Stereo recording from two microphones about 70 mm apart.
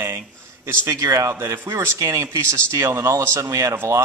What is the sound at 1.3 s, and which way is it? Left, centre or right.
Speech, right.